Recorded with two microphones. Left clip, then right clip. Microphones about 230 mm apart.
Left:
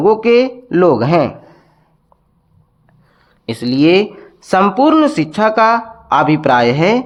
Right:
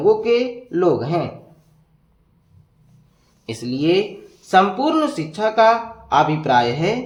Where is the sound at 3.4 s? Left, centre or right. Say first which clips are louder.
Left 8 dB; left.